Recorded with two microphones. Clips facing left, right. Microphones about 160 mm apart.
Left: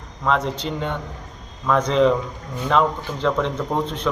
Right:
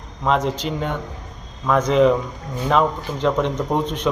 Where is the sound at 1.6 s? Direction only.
10° right (ahead or behind).